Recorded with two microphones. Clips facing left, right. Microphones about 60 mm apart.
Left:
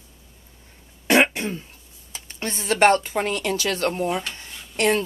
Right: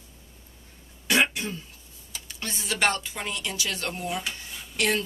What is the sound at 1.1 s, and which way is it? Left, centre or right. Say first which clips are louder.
Throat clearing: left 6 dB; left.